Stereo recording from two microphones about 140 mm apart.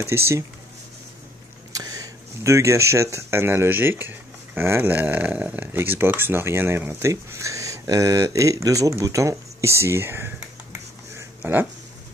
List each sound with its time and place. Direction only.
0.0 s speech: 20° right (ahead or behind)
1.7 s speech: 25° right (ahead or behind)